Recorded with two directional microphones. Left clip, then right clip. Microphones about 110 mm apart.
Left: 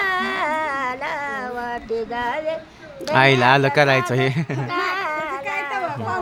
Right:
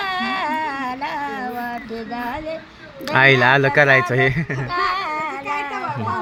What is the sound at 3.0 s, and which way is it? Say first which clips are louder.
Speech: right 1 dB; 15° left (ahead or behind).